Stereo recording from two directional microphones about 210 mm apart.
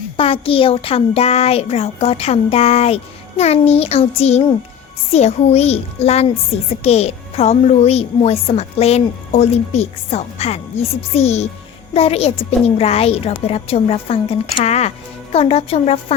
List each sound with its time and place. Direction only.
0.2 s speech: 25° left (ahead or behind)